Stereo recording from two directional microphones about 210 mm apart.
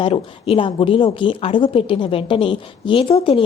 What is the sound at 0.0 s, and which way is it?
A woman's voice, 25° left (ahead or behind).